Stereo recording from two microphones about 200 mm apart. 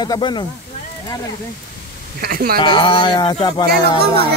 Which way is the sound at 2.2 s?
50° right (ahead or behind).